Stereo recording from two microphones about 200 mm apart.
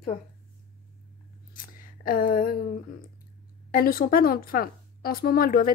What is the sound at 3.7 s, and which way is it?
A woman's voice, 45° left (ahead or behind).